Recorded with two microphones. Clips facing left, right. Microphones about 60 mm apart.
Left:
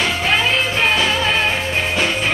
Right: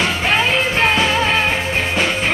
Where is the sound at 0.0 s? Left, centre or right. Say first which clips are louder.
Right 1 dB; right.